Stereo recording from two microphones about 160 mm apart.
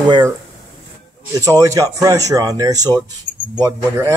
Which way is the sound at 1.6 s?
20° right (ahead or behind).